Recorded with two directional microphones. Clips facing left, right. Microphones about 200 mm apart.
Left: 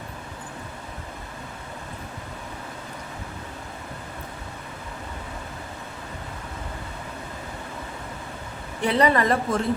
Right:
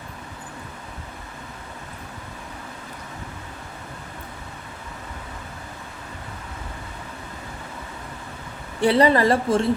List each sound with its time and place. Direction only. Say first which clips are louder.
8.8 s a woman's voice: right 4 dB; 30° right (ahead or behind)